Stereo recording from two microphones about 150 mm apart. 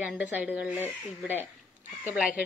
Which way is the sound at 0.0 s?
10° right (ahead or behind).